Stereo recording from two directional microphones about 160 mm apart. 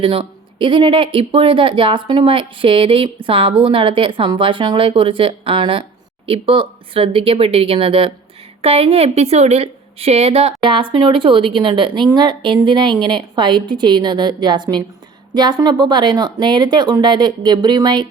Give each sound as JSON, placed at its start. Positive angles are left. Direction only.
{"t": 0.0, "sound": "speech", "side_deg": -35}